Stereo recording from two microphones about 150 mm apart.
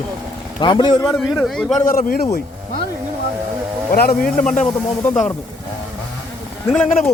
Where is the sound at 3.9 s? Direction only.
90° left.